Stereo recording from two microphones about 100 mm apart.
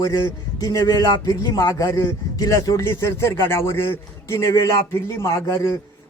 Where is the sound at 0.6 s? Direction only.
40° left (ahead or behind).